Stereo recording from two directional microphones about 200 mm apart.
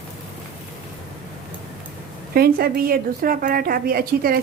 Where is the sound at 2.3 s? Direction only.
50° right (ahead or behind).